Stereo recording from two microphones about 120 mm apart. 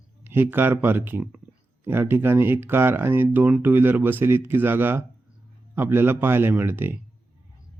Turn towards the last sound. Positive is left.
turn(degrees=-15)  # may be behind; listen again after turning